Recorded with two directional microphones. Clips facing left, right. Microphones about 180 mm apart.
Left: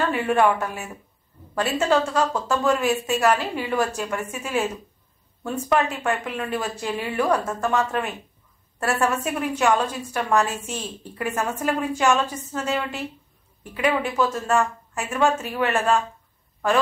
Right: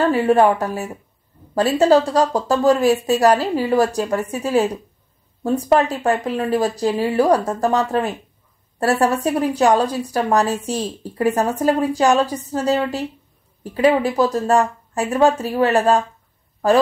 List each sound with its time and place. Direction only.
0.0 s speech: 35° right (ahead or behind)